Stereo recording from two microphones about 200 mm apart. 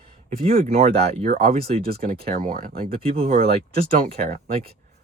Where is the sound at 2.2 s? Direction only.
45° right (ahead or behind).